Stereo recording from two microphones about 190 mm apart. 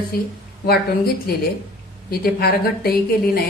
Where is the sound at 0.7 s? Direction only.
55° left (ahead or behind).